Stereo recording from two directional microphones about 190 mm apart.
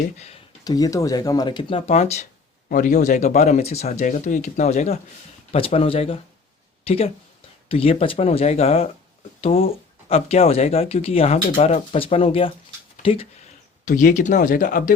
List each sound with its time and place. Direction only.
0.6 s speech: 20° left (ahead or behind); by 2.2 s 35° left (ahead or behind)
2.6 s speech: 45° left (ahead or behind); by 13.2 s 30° left (ahead or behind)
13.8 s speech: 45° left (ahead or behind)